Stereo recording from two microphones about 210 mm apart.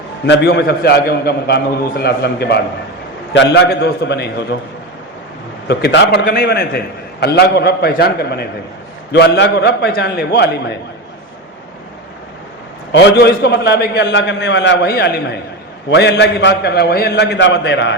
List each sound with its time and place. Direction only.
0.3 s a man's voice: 55° left (ahead or behind)
5.6 s a man's voice: 55° left (ahead or behind)
12.9 s a man's voice: 55° left (ahead or behind)